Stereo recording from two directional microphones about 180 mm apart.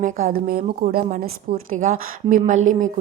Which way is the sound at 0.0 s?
50° right (ahead or behind).